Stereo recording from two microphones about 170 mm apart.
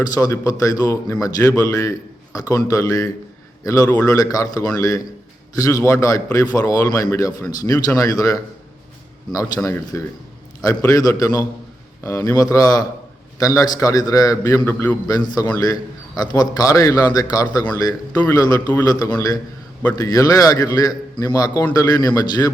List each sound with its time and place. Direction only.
0.1 s a man's voice: 20° left (ahead or behind)